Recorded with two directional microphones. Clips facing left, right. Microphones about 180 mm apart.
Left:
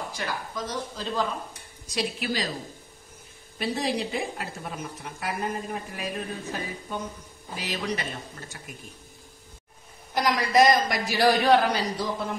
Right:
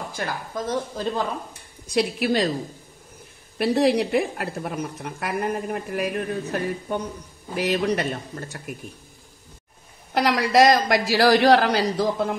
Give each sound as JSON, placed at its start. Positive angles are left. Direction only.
{"t": 0.1, "sound": "speech", "side_deg": -50}
{"t": 3.5, "sound": "speech", "side_deg": -65}
{"t": 10.1, "sound": "a woman's voice", "side_deg": -75}